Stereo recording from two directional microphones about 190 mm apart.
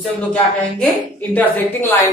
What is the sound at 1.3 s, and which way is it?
Speech, 10° left (ahead or behind).